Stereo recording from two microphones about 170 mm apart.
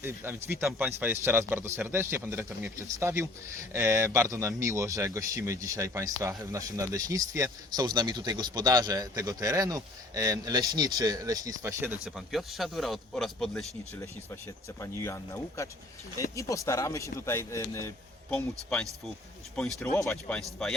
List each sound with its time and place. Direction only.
0.0 s a man's voice: 15° right (ahead or behind)
12.0 s speech: centre (ahead or behind)
14.8 s speech: 15° left (ahead or behind)
20.0 s speech: 15° left (ahead or behind)
20.6 s speech: 5° left (ahead or behind)